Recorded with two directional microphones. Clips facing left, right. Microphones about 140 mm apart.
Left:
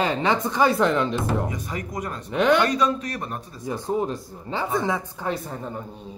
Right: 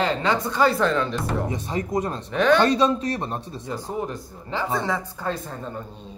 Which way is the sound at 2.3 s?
15° left (ahead or behind).